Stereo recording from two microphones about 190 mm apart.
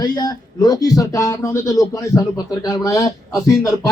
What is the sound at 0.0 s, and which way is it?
Speech, 20° left (ahead or behind).